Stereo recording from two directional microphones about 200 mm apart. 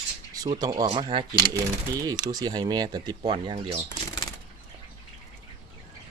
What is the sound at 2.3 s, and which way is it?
Speech, 20° right (ahead or behind).